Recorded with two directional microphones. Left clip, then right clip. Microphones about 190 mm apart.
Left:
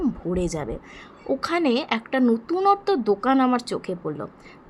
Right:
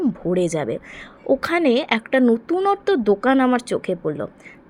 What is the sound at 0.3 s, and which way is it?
A woman's voice, 25° right (ahead or behind).